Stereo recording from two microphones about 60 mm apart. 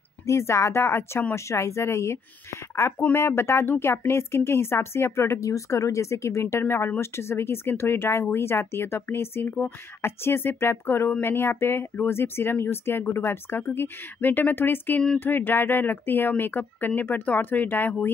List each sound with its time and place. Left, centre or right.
0.3 s a woman's voice: left